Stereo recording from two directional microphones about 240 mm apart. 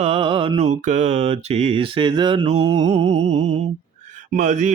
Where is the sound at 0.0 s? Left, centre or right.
Right.